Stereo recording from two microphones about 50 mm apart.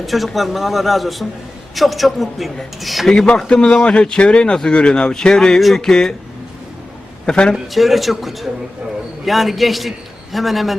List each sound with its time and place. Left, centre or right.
0.0 s a man's voice: centre
3.1 s speech: centre
5.5 s a man's voice: centre
5.8 s speech: centre
7.3 s speech: centre
7.7 s a man's voice: centre